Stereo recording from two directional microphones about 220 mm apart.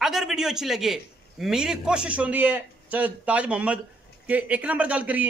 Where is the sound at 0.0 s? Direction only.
Centre (ahead or behind).